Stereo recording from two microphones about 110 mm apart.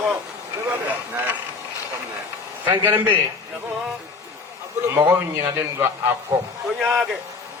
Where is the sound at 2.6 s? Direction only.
20° right (ahead or behind).